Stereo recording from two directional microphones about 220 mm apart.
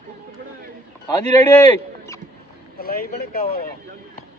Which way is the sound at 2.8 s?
40° left (ahead or behind).